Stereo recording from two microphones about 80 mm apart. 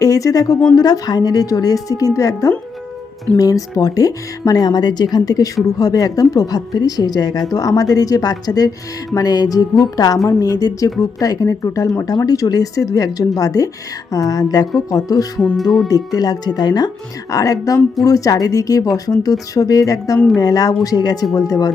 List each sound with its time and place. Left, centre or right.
0.0 s speech: left
17.3 s speech: left